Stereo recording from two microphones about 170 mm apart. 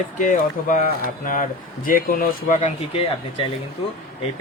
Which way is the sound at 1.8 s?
55° left (ahead or behind).